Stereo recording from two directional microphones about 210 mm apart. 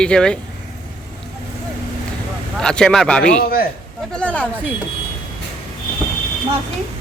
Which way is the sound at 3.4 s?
45° left (ahead or behind).